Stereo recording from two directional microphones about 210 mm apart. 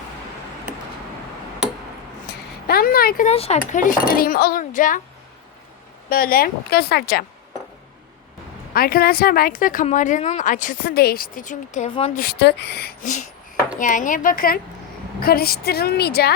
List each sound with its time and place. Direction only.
2.3 s a sound: 50° left (ahead or behind)
2.6 s speech: 45° left (ahead or behind)
3.2 s speech: 30° left (ahead or behind)
6.1 s speech: 45° left (ahead or behind)
8.7 s speech: 45° left (ahead or behind)
12.2 s speech: 50° left (ahead or behind)